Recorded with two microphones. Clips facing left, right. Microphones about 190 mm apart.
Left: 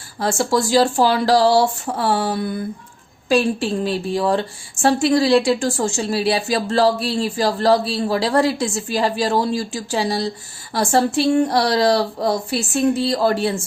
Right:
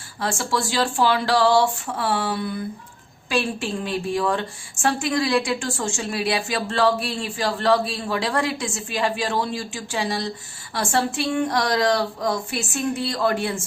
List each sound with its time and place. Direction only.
0.2 s a woman's voice: 40° left (ahead or behind)